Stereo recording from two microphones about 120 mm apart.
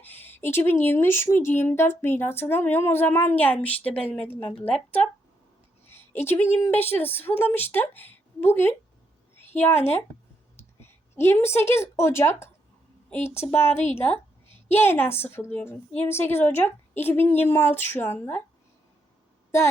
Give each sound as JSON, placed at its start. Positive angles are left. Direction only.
{"t": 0.0, "sound": "a woman's voice", "side_deg": 15}
{"t": 6.2, "sound": "a woman's voice", "side_deg": 20}
{"t": 9.7, "sound": "speech", "side_deg": 60}
{"t": 10.8, "sound": "a woman's voice", "side_deg": 20}
{"t": 13.7, "sound": "speech", "side_deg": 65}
{"t": 14.4, "sound": "a woman's voice", "side_deg": 20}